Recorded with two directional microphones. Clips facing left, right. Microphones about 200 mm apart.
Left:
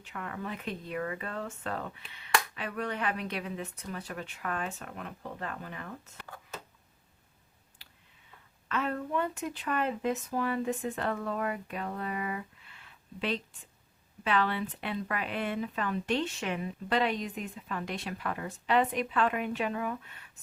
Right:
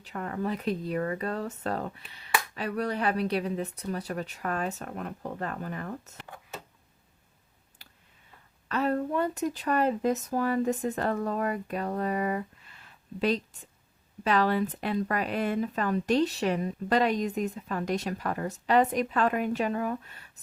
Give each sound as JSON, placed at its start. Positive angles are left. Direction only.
{"t": 0.0, "sound": "speech", "side_deg": -35}
{"t": 8.7, "sound": "speech", "side_deg": -35}